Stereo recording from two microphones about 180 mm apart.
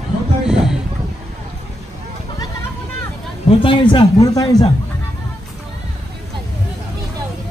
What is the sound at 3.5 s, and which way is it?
A woman's voice, 30° left (ahead or behind).